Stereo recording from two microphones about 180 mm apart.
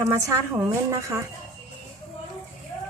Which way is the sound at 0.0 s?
15° right (ahead or behind).